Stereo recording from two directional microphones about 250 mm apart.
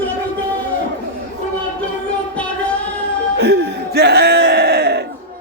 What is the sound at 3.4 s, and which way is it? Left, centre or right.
Music, right.